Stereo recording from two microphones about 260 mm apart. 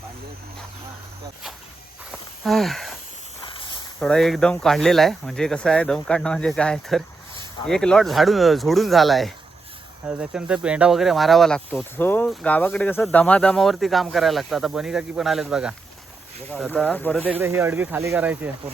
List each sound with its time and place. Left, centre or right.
2.4 s speech: centre
3.4 s a sound: centre
4.0 s speech: centre
16.7 s speech: centre
17.4 s speech: centre